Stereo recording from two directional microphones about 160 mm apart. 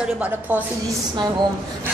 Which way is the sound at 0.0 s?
10° right (ahead or behind).